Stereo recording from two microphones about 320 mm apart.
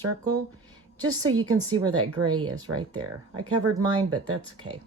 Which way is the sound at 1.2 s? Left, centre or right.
Right.